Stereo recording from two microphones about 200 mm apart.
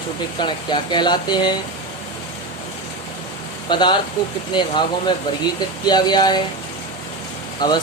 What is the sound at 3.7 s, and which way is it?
Speech, 25° left (ahead or behind).